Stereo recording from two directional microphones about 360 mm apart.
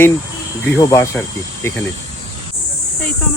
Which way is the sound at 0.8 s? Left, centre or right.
Centre.